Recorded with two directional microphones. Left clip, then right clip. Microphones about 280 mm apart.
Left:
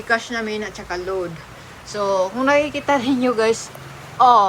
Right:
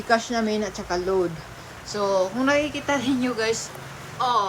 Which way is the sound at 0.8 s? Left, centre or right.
Centre.